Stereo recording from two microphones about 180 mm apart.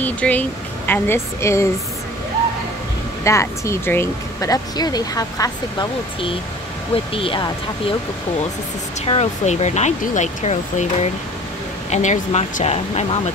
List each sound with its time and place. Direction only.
0.0 s speech: 10° left (ahead or behind)
3.3 s speech: 15° left (ahead or behind)
9.0 s speech: 35° left (ahead or behind)